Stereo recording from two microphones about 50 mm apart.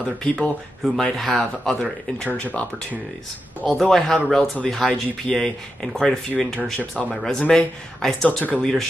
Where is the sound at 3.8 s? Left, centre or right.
Centre.